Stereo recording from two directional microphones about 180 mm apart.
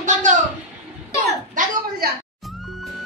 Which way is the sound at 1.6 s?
45° right (ahead or behind).